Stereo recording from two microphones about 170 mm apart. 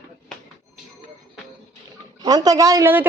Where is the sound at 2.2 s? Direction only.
20° right (ahead or behind).